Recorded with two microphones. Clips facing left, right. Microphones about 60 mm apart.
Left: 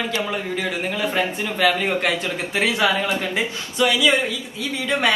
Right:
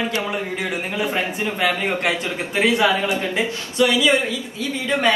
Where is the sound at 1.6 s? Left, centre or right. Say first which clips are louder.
Left 3 dB; right.